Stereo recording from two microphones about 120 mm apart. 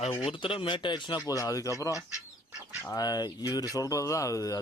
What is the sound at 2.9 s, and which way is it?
Speech, 30° left (ahead or behind).